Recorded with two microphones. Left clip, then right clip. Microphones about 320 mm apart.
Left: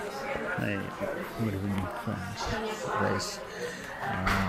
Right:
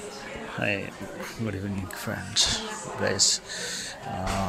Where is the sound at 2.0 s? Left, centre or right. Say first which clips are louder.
Right 9 dB; right.